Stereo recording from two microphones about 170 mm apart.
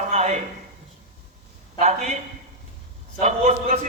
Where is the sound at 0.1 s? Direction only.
45° right (ahead or behind).